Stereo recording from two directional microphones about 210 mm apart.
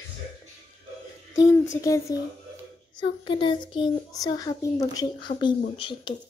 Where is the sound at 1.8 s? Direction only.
15° left (ahead or behind).